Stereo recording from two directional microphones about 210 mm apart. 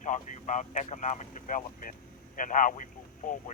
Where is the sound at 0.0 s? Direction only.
35° left (ahead or behind).